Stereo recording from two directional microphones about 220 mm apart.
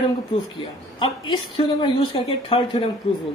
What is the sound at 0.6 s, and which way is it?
A woman's voice, 20° left (ahead or behind).